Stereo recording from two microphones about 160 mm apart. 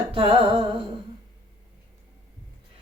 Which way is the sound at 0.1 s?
35° right (ahead or behind).